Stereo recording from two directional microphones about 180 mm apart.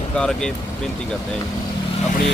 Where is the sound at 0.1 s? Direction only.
5° left (ahead or behind).